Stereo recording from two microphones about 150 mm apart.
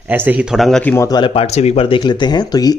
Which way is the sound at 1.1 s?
35° left (ahead or behind).